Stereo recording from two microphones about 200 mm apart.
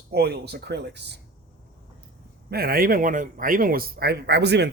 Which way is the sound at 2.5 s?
50° right (ahead or behind).